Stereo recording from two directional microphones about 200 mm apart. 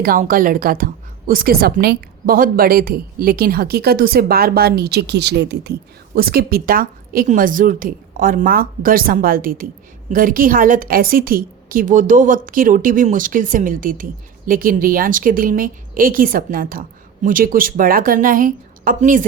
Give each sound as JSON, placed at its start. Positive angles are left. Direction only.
{"t": 0.0, "sound": "a woman's voice", "side_deg": -45}